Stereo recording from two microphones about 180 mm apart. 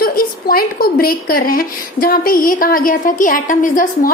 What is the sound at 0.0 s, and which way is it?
A woman's voice, 55° left (ahead or behind).